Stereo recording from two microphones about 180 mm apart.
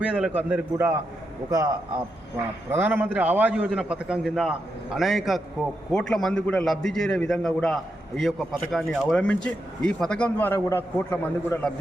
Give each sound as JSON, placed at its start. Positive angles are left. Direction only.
{"t": 0.0, "sound": "a man's voice", "side_deg": -5}